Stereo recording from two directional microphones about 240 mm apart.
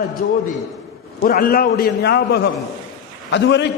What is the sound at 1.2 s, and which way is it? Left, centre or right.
A man's voice, left.